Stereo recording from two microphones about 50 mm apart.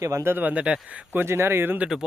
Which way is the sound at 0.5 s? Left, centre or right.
Right.